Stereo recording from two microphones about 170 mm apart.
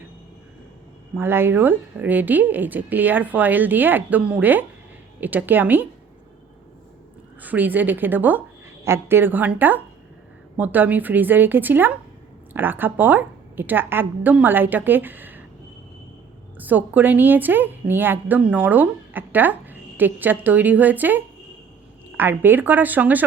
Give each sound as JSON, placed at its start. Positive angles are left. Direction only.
{"t": 1.1, "sound": "a woman's voice", "side_deg": -15}
{"t": 7.4, "sound": "a woman's voice", "side_deg": -10}
{"t": 16.6, "sound": "a woman's voice", "side_deg": -10}